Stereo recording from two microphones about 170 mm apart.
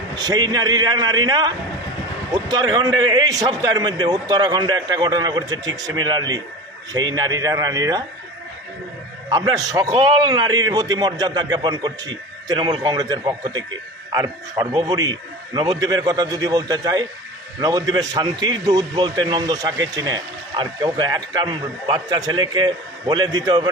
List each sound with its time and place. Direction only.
0.2 s a man's voice: 25° right (ahead or behind)
9.3 s a man's voice: 20° right (ahead or behind)